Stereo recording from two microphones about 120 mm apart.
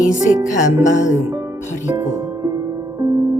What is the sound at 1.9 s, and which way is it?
Music, 30° right (ahead or behind).